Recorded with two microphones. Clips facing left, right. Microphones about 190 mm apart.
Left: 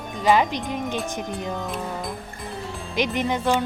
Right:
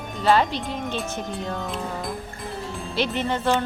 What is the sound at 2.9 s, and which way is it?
Speech, 15° left (ahead or behind).